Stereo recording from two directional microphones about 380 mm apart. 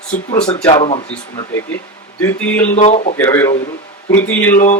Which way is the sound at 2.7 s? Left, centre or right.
Centre.